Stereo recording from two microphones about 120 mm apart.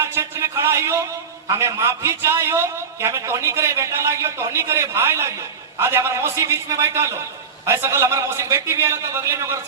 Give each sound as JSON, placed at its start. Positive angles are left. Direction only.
{"t": 0.0, "sound": "a man's voice", "side_deg": -20}